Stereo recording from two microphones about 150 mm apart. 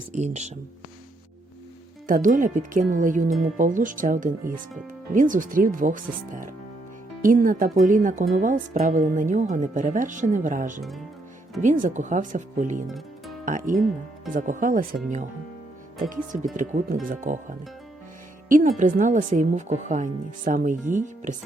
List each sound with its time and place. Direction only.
0.1 s speech: 50° right (ahead or behind)
2.0 s speech: 60° right (ahead or behind)
18.4 s speech: 65° right (ahead or behind)